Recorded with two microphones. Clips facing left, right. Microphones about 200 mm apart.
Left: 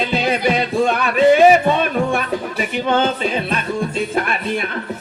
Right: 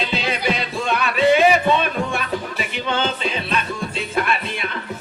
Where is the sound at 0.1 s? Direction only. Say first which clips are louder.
Left 5 dB; 50° left (ahead or behind).